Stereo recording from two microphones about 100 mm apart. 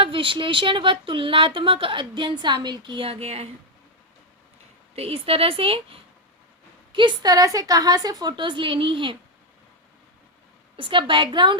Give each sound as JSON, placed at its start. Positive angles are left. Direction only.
{"t": 0.0, "sound": "speech", "side_deg": -60}
{"t": 4.9, "sound": "speech", "side_deg": -75}
{"t": 6.9, "sound": "a woman's voice", "side_deg": -55}
{"t": 10.8, "sound": "speech", "side_deg": -60}